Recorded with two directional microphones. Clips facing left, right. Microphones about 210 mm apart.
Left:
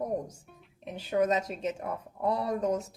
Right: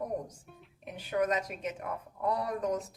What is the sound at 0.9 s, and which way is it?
A woman's voice, 25° left (ahead or behind).